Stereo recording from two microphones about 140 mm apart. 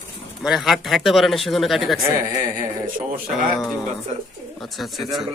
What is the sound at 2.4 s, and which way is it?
Speech, 70° right (ahead or behind).